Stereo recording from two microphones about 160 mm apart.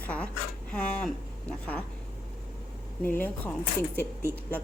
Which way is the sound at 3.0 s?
10° left (ahead or behind).